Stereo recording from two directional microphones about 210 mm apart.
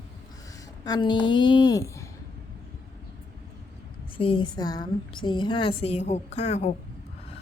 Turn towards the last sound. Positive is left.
turn(degrees=30)  # may be behind; listen again after turning